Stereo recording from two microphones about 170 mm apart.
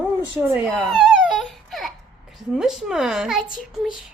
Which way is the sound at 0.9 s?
5° right (ahead or behind).